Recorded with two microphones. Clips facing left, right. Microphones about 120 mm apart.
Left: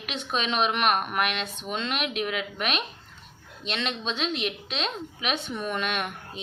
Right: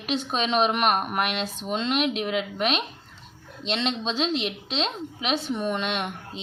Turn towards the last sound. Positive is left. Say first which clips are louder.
# right 1 dB
turn(degrees=-30)  # may be behind; listen again after turning